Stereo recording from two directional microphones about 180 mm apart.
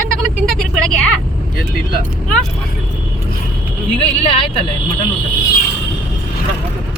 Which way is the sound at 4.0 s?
30° left (ahead or behind).